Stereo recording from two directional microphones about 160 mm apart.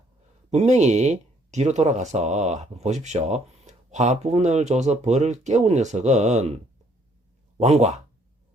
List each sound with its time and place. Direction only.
0.5 s speech: 45° right (ahead or behind)
7.6 s speech: 45° right (ahead or behind)